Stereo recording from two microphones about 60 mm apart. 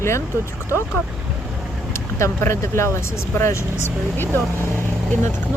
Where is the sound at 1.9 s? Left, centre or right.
Left.